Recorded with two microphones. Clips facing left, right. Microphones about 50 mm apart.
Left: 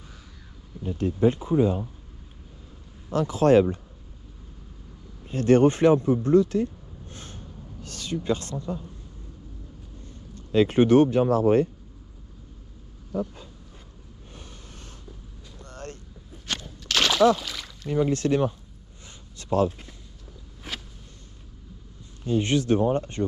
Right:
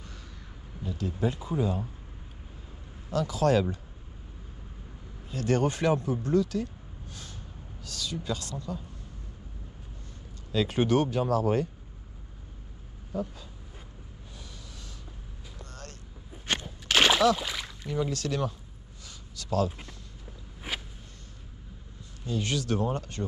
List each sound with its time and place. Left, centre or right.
0.8 s speech: left
3.1 s speech: left
5.3 s speech: left
10.3 s speech: left
14.3 s a sound: left
15.6 s vehicle: left
16.3 s a sound: right
17.4 s speech: centre
17.8 s speech: left
19.0 s a sound: left
20.7 s a sound: centre
22.2 s speech: left